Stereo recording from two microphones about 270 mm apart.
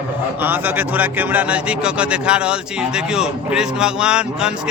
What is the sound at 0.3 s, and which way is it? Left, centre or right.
Speech, centre.